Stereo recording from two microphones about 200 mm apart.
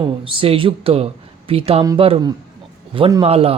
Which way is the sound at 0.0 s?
25° right (ahead or behind).